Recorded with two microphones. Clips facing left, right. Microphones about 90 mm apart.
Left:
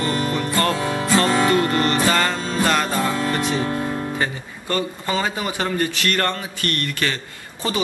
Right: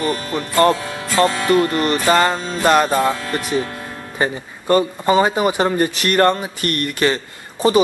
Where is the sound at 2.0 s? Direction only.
25° right (ahead or behind).